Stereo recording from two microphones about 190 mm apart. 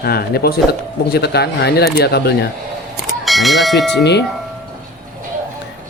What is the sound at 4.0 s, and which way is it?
Speech, 65° left (ahead or behind).